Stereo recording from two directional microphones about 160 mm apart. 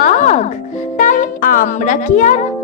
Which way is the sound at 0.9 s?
55° left (ahead or behind).